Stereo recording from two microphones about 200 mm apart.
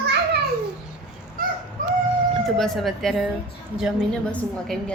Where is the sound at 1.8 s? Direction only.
40° right (ahead or behind).